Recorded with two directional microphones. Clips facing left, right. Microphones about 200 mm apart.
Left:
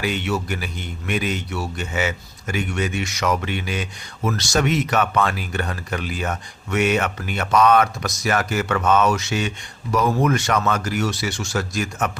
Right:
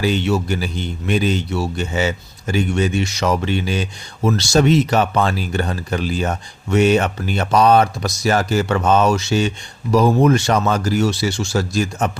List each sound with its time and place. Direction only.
0.0 s a man's voice: 30° right (ahead or behind)